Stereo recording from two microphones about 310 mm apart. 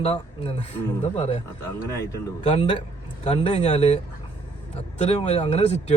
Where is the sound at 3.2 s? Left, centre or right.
Left.